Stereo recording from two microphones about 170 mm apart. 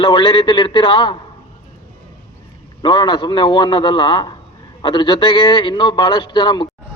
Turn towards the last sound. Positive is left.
turn(degrees=25)  # may be behind; listen again after turning